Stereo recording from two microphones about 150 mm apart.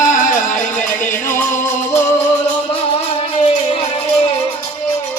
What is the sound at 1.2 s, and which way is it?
Music, 15° left (ahead or behind).